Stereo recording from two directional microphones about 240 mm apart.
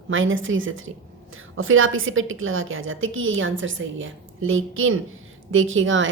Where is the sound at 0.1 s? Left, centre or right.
Right.